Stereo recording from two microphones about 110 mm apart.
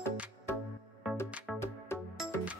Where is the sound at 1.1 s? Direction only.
20° left (ahead or behind).